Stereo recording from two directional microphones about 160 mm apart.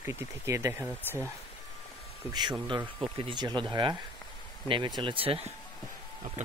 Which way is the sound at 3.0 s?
30° right (ahead or behind).